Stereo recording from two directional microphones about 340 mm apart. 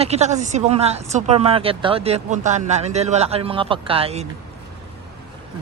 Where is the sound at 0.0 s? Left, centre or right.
Centre.